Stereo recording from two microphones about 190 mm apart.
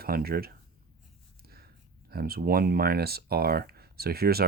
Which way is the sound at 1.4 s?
55° right (ahead or behind).